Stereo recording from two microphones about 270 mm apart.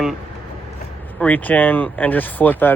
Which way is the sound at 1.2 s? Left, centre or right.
Centre.